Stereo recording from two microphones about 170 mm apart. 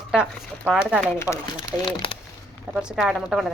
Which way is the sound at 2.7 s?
5° right (ahead or behind).